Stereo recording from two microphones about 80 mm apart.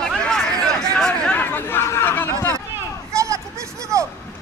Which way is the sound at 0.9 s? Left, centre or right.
Centre.